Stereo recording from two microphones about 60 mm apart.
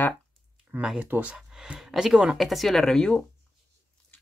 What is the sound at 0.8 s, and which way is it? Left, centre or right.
Speech, centre.